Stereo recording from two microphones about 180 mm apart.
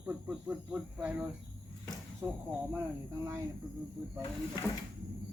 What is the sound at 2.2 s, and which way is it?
Speech, 20° right (ahead or behind).